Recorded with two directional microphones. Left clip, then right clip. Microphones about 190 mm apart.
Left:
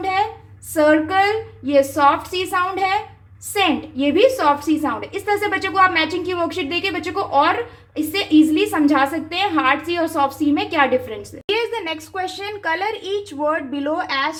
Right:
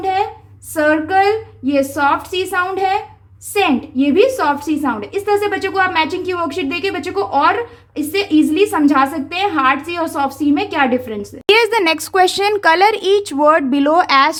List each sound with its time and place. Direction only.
0.7 s a woman's voice: 25° right (ahead or behind)
11.4 s speech: 35° right (ahead or behind)